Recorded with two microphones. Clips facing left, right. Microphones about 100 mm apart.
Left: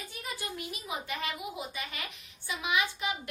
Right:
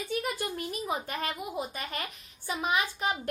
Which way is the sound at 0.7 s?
45° right (ahead or behind).